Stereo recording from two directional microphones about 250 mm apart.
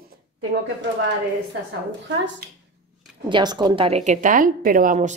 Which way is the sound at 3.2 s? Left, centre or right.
Centre.